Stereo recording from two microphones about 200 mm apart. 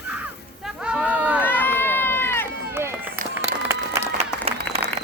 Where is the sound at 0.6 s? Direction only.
5° right (ahead or behind).